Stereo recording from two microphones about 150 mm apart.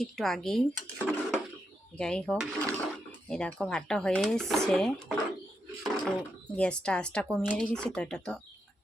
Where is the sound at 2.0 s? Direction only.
5° left (ahead or behind).